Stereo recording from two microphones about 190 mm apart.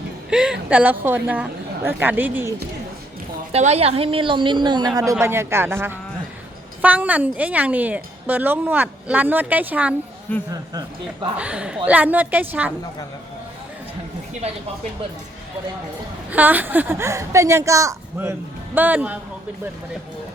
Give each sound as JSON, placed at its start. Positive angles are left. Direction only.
{"t": 0.3, "sound": "a woman's voice", "side_deg": -5}
{"t": 3.5, "sound": "a woman's voice", "side_deg": -35}
{"t": 5.2, "sound": "a woman's voice", "side_deg": -15}
{"t": 10.5, "sound": "a woman's voice", "side_deg": -20}
{"t": 11.3, "sound": "a woman's voice", "side_deg": -5}
{"t": 16.3, "sound": "a woman's voice", "side_deg": -10}